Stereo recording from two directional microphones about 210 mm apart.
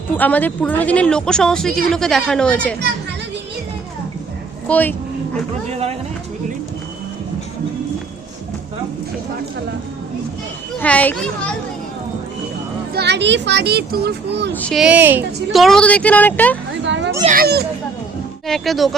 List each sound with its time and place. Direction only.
0.1 s speech: 5° left (ahead or behind)
4.7 s a woman's voice: 10° left (ahead or behind)
10.8 s a woman's voice: 5° left (ahead or behind)
12.9 s speech: 50° right (ahead or behind)
14.5 s a woman's voice: 5° left (ahead or behind)
16.8 s children playing: 60° right (ahead or behind)
17.2 s speech: 45° right (ahead or behind)
18.4 s speech: centre (ahead or behind)